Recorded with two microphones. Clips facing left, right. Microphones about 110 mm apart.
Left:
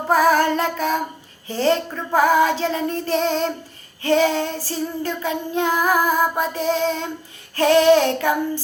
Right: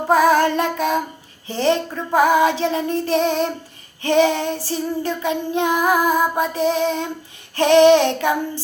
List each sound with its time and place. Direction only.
0.1 s child singing: 20° right (ahead or behind)